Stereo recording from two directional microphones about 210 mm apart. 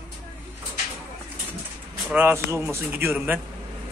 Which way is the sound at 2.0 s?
10° right (ahead or behind).